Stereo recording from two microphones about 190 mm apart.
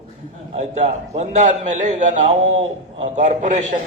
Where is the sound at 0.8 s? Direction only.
35° right (ahead or behind).